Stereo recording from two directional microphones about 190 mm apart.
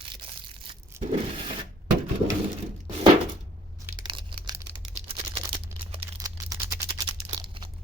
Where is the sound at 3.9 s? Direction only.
25° right (ahead or behind).